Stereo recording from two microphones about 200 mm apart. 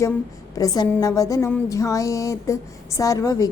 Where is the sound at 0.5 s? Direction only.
20° left (ahead or behind).